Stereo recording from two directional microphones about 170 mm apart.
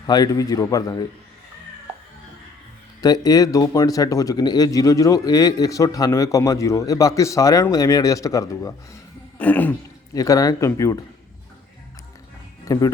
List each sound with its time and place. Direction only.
0.0 s speech: 25° left (ahead or behind)
3.0 s speech: 20° left (ahead or behind)
9.4 s throat clearing: 10° left (ahead or behind)
10.2 s speech: 20° left (ahead or behind)
12.6 s speech: 20° left (ahead or behind)